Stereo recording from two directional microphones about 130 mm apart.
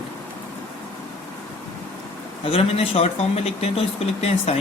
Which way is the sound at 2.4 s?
45° left (ahead or behind).